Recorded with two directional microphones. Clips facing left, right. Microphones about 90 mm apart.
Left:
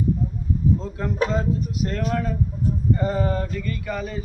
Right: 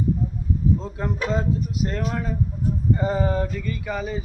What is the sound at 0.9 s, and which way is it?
Speech, 20° right (ahead or behind).